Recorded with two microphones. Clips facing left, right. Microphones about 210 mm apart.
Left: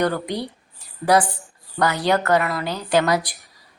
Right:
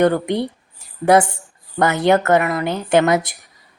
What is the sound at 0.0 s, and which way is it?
A woman's voice, 25° right (ahead or behind).